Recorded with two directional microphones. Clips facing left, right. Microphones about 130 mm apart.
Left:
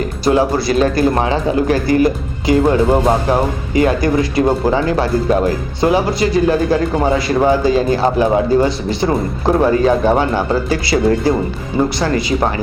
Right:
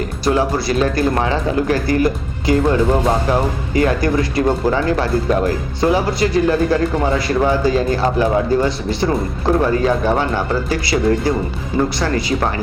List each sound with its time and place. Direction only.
0.3 s speech: 20° left (ahead or behind)